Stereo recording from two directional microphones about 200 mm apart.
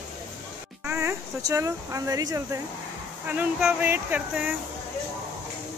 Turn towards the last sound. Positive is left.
turn(degrees=-5)  # may be behind; listen again after turning